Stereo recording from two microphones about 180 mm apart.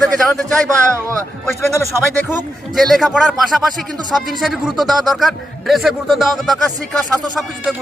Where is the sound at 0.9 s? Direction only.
15° right (ahead or behind).